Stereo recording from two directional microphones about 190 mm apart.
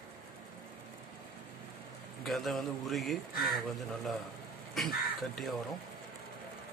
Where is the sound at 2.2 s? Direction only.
Centre (ahead or behind).